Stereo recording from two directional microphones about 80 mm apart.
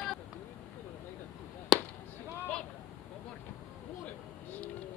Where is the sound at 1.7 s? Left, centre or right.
Centre.